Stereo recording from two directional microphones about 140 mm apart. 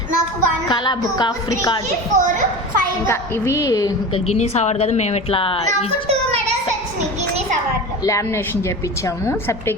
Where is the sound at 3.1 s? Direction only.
20° left (ahead or behind).